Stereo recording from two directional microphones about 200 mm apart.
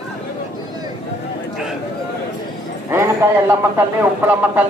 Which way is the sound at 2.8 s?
15° right (ahead or behind).